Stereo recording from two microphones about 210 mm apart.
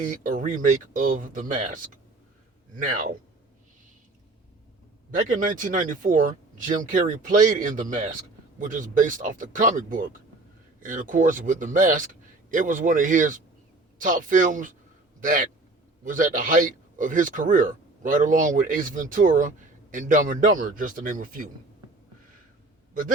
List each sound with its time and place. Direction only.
0.0 s speech: 40° right (ahead or behind)
5.1 s speech: 40° right (ahead or behind)